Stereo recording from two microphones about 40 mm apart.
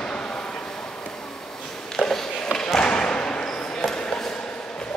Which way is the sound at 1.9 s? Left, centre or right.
Centre.